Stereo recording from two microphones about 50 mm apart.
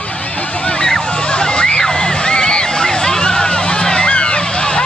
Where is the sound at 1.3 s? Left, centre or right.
Centre.